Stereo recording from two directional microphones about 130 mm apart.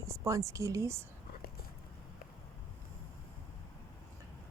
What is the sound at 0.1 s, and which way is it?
Speech, 25° right (ahead or behind).